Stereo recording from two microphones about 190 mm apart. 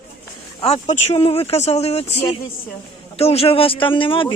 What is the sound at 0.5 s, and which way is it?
A man's voice, 35° left (ahead or behind).